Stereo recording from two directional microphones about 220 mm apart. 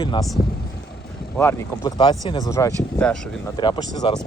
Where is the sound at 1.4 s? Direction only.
10° left (ahead or behind).